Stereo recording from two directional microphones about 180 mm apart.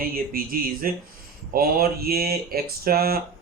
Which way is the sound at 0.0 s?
55° right (ahead or behind).